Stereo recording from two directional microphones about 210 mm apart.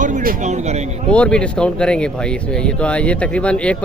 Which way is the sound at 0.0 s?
40° right (ahead or behind).